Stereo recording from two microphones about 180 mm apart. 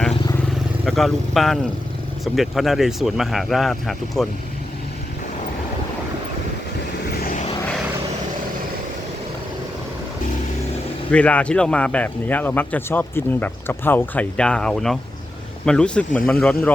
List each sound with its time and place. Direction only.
0.9 s speech: centre (ahead or behind)
7.1 s vehicle: 55° left (ahead or behind)
11.1 s speech: 5° left (ahead or behind)